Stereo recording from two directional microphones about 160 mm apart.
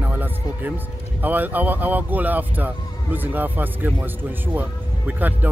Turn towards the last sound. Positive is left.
turn(degrees=-10)  # may be behind; listen again after turning